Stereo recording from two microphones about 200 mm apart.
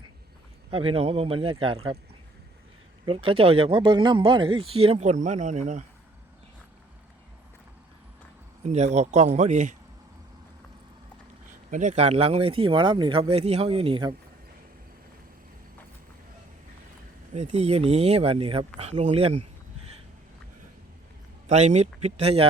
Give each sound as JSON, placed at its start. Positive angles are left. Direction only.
{"t": 0.7, "sound": "speech", "side_deg": -25}
{"t": 3.1, "sound": "speech", "side_deg": -25}
{"t": 8.6, "sound": "speech", "side_deg": -35}
{"t": 11.7, "sound": "speech", "side_deg": -40}
{"t": 17.3, "sound": "speech", "side_deg": -35}
{"t": 21.4, "sound": "speech", "side_deg": -35}